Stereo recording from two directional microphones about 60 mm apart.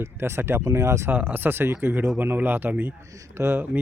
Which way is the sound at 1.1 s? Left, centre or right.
Right.